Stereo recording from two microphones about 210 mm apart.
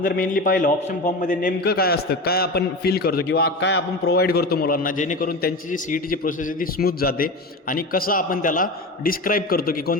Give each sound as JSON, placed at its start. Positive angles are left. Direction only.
{"t": 0.0, "sound": "a man's voice", "side_deg": 45}